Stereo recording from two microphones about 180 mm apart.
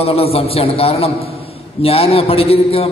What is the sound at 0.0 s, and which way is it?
A man's voice, 35° left (ahead or behind).